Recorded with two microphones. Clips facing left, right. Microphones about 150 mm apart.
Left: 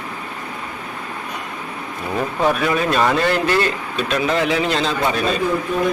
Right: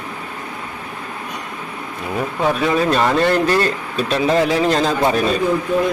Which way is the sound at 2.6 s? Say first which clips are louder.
Right 2 dB; 30° right (ahead or behind).